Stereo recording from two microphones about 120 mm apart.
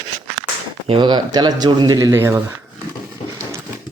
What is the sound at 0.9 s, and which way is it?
Speech, 40° right (ahead or behind).